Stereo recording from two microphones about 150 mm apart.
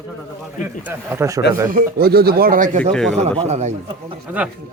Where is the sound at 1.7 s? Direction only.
75° right (ahead or behind); by 2.9 s 60° right (ahead or behind).